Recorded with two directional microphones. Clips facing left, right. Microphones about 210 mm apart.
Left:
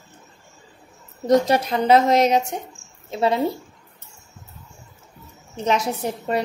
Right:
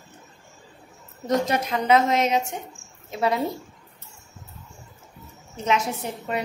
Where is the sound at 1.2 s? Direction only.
35° left (ahead or behind).